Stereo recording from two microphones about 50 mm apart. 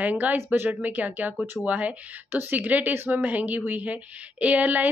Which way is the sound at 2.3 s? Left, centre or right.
Right.